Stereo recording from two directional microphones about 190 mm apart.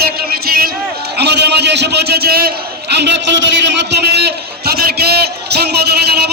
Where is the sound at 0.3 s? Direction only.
50° right (ahead or behind).